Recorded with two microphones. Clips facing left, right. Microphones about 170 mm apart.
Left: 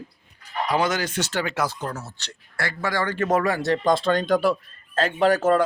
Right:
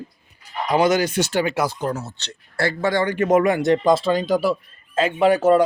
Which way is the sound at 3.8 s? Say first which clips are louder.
Right 3 dB; 5° right (ahead or behind).